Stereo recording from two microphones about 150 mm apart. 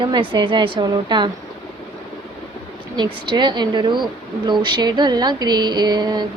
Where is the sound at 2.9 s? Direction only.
30° right (ahead or behind).